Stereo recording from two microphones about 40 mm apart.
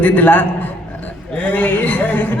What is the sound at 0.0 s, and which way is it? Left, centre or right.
A man's voice, left.